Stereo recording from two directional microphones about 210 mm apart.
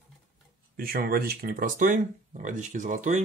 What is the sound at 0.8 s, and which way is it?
Speech, 45° right (ahead or behind).